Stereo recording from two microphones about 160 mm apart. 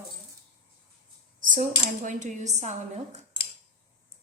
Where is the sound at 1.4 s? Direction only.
55° right (ahead or behind).